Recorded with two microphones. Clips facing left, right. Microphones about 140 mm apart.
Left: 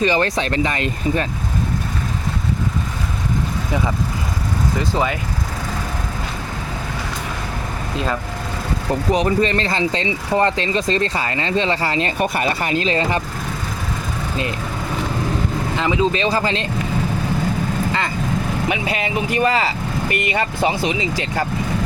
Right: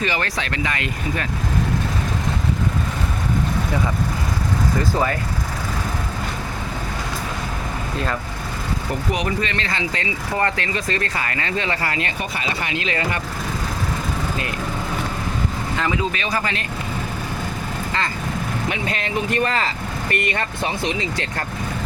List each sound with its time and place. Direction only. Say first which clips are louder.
0.0 s speech: left 6 dB; 25° left (ahead or behind)
4.8 s speech: left 1 dB; 20° left (ahead or behind)
9.1 s speech: left 9 dB; 35° left (ahead or behind)
12.2 s speech: left 6 dB; 50° left (ahead or behind); by 13.2 s 30° left (ahead or behind)
15.8 s speech: left 6 dB; 20° left (ahead or behind)
18.7 s speech: left 3 dB; 10° left (ahead or behind)